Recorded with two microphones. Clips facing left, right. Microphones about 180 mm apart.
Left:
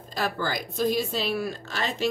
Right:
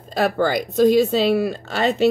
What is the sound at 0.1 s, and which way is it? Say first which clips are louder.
A woman's voice: right 10 dB; 65° right (ahead or behind).